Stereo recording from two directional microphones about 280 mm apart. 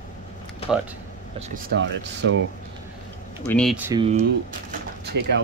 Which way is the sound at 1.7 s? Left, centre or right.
Right.